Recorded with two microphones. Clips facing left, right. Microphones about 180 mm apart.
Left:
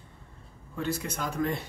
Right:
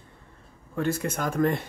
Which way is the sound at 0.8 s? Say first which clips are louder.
Right 5 dB; 50° right (ahead or behind).